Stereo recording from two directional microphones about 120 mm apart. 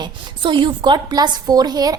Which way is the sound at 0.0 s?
40° right (ahead or behind).